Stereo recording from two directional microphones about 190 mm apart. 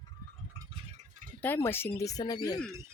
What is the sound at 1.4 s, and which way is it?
Speech, 10° left (ahead or behind).